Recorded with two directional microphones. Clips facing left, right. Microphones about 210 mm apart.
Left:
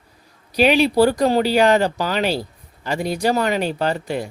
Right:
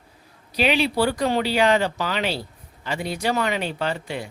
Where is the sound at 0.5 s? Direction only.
40° left (ahead or behind).